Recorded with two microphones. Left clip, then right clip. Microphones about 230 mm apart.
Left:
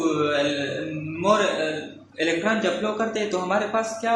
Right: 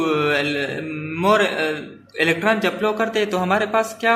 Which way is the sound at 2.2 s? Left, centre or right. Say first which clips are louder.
Right 5 dB; right.